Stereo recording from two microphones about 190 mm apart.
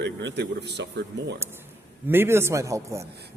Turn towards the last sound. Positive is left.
turn(degrees=-15)  # may be behind; listen again after turning